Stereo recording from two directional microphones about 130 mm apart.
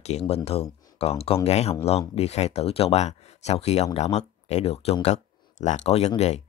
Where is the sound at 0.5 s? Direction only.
50° left (ahead or behind).